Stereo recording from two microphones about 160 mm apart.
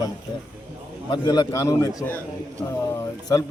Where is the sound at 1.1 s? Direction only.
25° left (ahead or behind).